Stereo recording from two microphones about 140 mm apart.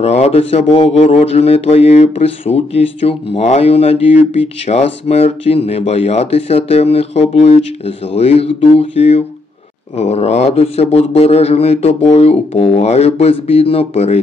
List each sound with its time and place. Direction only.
0.0 s speech: 50° left (ahead or behind)